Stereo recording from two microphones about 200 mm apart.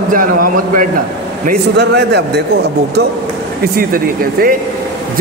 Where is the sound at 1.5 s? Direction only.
55° right (ahead or behind).